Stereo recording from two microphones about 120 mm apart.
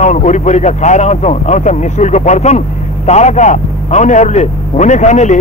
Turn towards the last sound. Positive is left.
turn(degrees=80)